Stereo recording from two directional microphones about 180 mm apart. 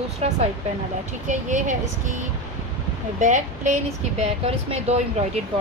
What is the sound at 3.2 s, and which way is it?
Speech, 40° right (ahead or behind).